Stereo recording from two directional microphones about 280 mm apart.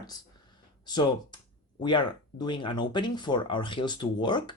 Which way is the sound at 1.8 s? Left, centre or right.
Centre.